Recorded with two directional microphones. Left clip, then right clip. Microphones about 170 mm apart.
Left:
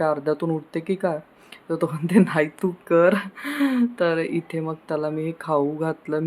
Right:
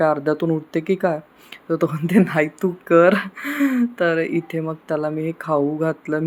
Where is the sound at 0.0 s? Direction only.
15° right (ahead or behind).